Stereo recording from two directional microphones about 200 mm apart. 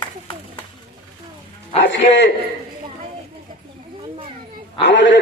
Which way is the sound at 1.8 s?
65° left (ahead or behind).